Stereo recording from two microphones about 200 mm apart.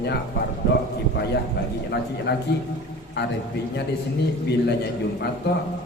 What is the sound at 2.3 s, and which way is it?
Speech, 55° left (ahead or behind).